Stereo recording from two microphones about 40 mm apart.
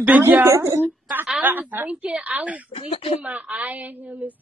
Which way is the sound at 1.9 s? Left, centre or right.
Right.